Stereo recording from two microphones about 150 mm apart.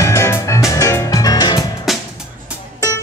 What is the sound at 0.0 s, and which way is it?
Music, 20° left (ahead or behind).